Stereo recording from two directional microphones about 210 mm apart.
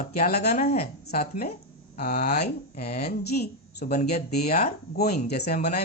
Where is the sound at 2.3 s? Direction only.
50° left (ahead or behind).